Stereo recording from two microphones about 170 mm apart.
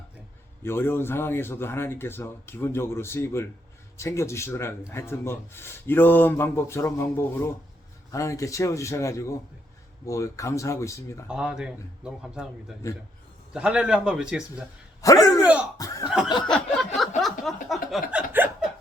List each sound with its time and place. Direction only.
0.6 s speech: 15° left (ahead or behind)
11.3 s a man's voice: 5° right (ahead or behind)
12.8 s speech: 15° left (ahead or behind)
13.5 s a man's voice: 5° right (ahead or behind)
15.0 s speech: 20° left (ahead or behind)
16.0 s snicker: 5° right (ahead or behind)
16.5 s a sound: centre (ahead or behind)